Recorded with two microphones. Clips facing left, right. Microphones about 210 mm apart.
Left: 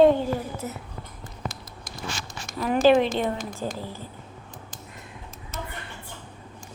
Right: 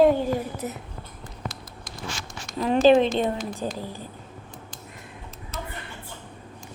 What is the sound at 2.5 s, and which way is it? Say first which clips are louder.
A woman's voice: right 2 dB; 25° right (ahead or behind).